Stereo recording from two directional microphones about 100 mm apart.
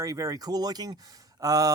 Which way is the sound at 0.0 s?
35° right (ahead or behind).